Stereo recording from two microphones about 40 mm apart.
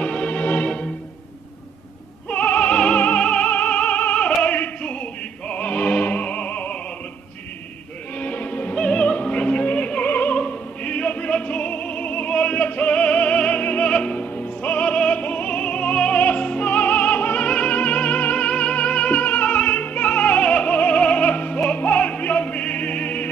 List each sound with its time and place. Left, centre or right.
0.0 s music: left
2.2 s opera: left
3.2 s music: left
4.4 s opera: left
5.5 s music: left
8.2 s music: left
8.7 s opera: left
11.3 s music: left
13.8 s opera: left
16.2 s music: left
17.4 s music: left